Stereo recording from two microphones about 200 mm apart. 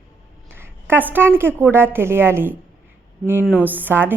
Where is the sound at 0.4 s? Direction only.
10° right (ahead or behind).